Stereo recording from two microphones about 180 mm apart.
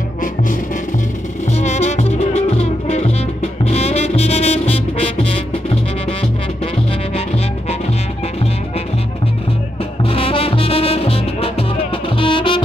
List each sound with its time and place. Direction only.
1.5 s music: 40° left (ahead or behind)
10.0 s music: 30° left (ahead or behind)